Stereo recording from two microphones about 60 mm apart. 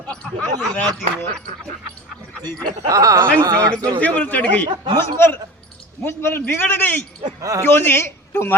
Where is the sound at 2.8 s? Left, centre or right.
Right.